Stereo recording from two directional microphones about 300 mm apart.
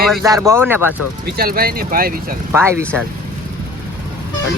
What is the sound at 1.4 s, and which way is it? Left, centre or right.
Speech, right.